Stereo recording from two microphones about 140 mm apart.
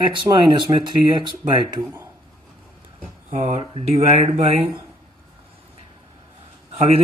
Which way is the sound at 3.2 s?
60° right (ahead or behind).